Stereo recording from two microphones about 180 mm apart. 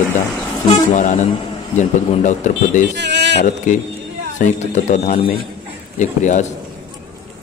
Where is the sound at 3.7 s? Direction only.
40° left (ahead or behind).